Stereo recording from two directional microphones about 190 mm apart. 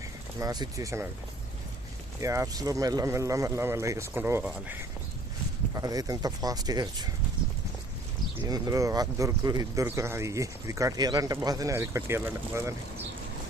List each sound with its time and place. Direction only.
0.3 s speech: 20° right (ahead or behind)
2.2 s speech: 15° right (ahead or behind)
8.4 s speech: 20° right (ahead or behind)